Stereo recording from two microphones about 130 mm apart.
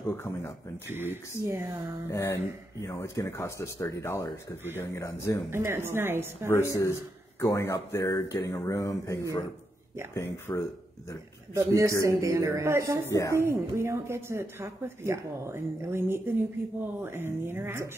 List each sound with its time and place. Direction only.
0.1 s speech: 15° left (ahead or behind)
0.8 s a woman's voice: 15° right (ahead or behind)
2.0 s speech: 20° left (ahead or behind)
5.5 s a woman's voice: 20° right (ahead or behind)
6.5 s a man's voice: 20° left (ahead or behind)
11.5 s speech: 25° right (ahead or behind)
13.1 s speech: 25° left (ahead or behind)
13.4 s a woman's voice: 20° right (ahead or behind)